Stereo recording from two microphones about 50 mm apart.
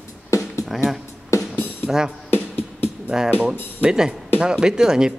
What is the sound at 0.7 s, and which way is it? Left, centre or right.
Speech, centre.